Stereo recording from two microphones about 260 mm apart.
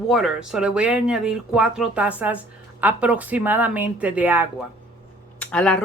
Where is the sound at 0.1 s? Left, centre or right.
Centre.